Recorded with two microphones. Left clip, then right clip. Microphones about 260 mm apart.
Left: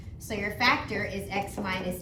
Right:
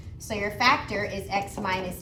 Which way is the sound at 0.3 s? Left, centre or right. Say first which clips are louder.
Right 3 dB; centre.